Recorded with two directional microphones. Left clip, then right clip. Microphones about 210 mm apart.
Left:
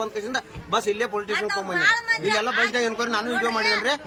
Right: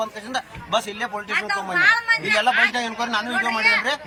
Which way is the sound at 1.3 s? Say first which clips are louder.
Right 5 dB; 20° left (ahead or behind).